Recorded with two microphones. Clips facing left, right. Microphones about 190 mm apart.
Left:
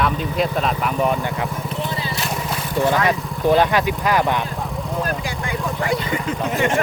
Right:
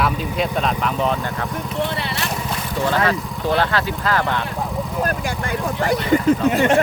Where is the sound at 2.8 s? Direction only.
15° left (ahead or behind).